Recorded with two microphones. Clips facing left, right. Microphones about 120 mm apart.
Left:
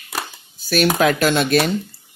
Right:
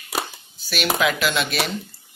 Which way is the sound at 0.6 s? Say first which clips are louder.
Left 6 dB; 45° left (ahead or behind).